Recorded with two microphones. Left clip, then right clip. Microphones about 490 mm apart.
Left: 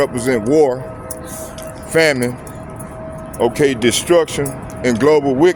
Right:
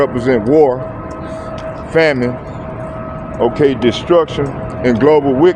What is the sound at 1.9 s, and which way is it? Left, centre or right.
Speech, left.